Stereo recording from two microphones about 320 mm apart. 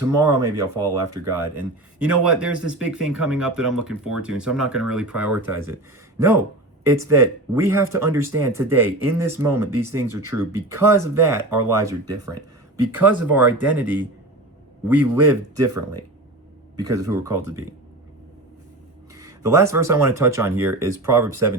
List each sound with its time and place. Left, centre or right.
0.0 s speech: centre
13.0 s speech: centre
16.8 s speech: centre
19.1 s speech: centre